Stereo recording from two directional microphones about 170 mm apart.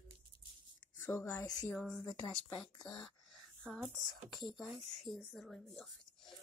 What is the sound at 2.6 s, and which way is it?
Speech, 25° left (ahead or behind).